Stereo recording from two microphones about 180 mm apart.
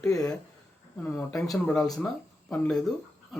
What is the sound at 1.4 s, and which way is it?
A man's voice, 5° left (ahead or behind).